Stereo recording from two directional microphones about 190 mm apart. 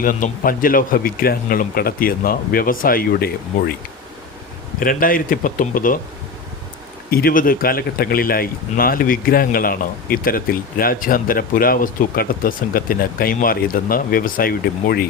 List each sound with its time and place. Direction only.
0.0 s speech: 45° left (ahead or behind)
4.8 s speech: 50° left (ahead or behind)
7.1 s speech: 50° left (ahead or behind)